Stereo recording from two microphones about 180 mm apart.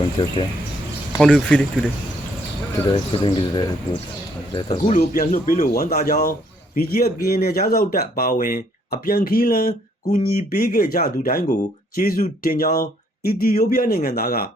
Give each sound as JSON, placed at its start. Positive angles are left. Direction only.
{"t": 0.2, "sound": "speech", "side_deg": 30}
{"t": 1.2, "sound": "speech", "side_deg": 5}
{"t": 2.9, "sound": "speech", "side_deg": 30}
{"t": 4.9, "sound": "speech", "side_deg": 50}